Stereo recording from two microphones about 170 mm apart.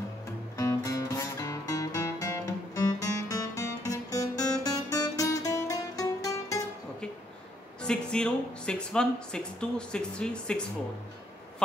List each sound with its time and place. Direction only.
0.6 s music: 20° left (ahead or behind)
7.8 s speech: 5° left (ahead or behind)